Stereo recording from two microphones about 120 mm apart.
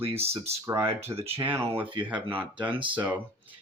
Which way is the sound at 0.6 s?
20° right (ahead or behind).